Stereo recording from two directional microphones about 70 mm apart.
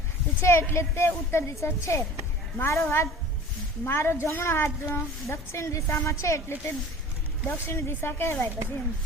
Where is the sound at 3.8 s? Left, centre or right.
Left.